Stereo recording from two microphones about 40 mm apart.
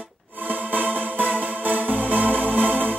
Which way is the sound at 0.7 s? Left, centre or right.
Right.